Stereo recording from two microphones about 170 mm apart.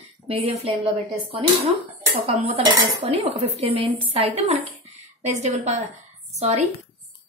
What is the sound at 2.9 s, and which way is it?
A woman's voice, 30° right (ahead or behind).